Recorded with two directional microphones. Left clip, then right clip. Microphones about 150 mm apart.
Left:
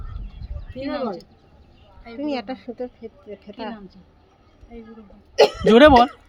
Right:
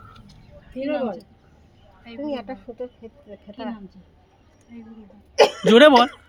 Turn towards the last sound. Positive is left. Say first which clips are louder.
# left 1 dB
turn(degrees=0)  # may be behind; listen again after turning